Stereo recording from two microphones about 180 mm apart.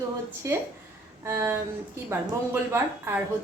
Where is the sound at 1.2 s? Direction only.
15° right (ahead or behind).